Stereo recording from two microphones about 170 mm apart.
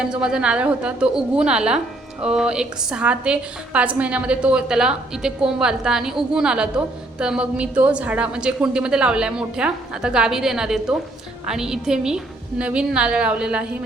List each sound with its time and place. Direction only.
0.0 s a woman's voice: 5° right (ahead or behind)